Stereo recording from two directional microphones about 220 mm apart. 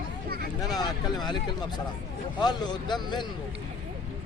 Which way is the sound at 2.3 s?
20° left (ahead or behind).